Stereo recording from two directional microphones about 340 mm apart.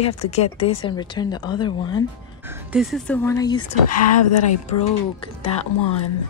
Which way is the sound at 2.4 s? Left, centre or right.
Centre.